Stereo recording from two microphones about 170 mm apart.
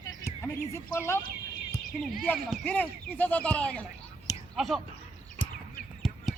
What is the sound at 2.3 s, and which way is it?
Speech, centre (ahead or behind).